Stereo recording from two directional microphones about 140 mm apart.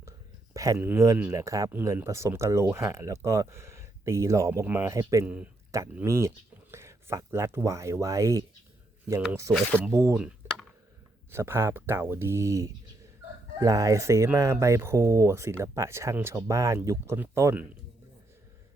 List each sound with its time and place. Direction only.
0.5 s speech: 25° right (ahead or behind)
5.2 s speech: 10° right (ahead or behind)
5.7 s speech: 20° right (ahead or behind)
9.9 s speech: 20° right (ahead or behind)
10.2 s a sound: 5° right (ahead or behind)
11.3 s speech: 15° right (ahead or behind)